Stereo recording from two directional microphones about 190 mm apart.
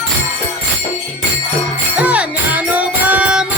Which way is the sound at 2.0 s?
5° right (ahead or behind).